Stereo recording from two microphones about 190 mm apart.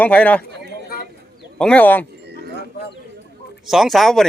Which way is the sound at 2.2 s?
60° right (ahead or behind).